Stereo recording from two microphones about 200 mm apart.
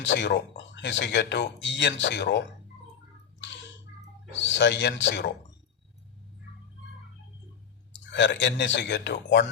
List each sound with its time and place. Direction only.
0.0 s speech: 60° left (ahead or behind)
4.4 s speech: 65° left (ahead or behind)
8.1 s speech: 60° left (ahead or behind)